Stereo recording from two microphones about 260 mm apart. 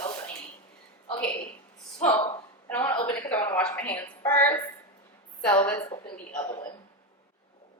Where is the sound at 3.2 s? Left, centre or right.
Centre.